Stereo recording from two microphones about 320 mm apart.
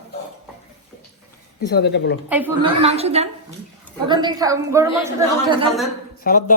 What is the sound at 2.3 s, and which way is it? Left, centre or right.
Speech, centre.